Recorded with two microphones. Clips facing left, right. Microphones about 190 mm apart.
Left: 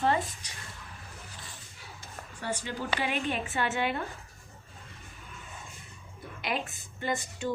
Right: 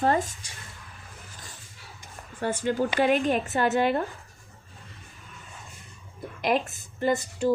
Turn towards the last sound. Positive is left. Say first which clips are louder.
# right 8 dB
turn(degrees=-40)  # may be behind; listen again after turning